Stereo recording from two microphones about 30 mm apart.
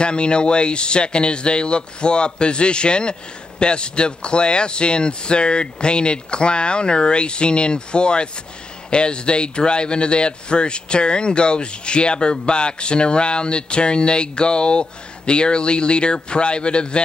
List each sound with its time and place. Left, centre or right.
0.0 s speech: left